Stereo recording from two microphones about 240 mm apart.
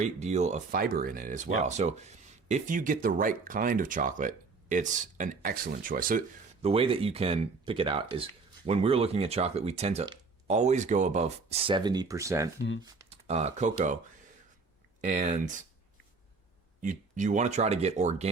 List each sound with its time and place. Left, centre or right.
0.0 s speech: right; by 12.5 s centre
12.8 s speech: right
15.0 s speech: right
16.8 s speech: right